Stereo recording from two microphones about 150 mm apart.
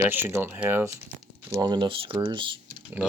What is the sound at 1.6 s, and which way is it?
Speech, 30° right (ahead or behind).